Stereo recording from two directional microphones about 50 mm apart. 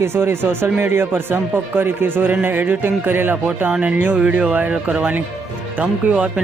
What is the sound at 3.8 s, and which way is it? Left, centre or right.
Speech, right.